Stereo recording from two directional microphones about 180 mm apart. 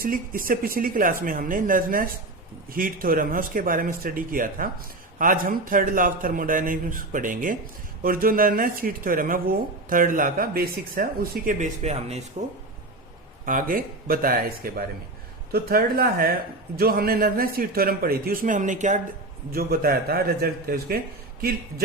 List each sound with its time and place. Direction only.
0.0 s speech: 50° right (ahead or behind)
13.4 s a man's voice: 50° right (ahead or behind)
19.5 s a man's voice: 55° right (ahead or behind)